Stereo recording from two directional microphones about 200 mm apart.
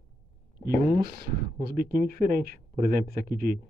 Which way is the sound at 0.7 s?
35° right (ahead or behind).